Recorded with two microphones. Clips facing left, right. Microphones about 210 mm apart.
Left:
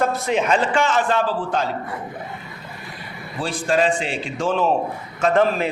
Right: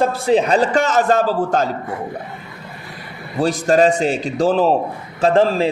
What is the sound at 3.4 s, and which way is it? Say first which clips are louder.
A man's voice: right 6 dB; 40° right (ahead or behind).